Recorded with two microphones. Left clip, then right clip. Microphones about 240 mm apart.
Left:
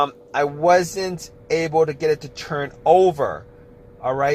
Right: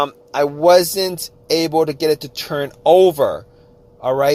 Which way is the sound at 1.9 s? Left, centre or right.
Right.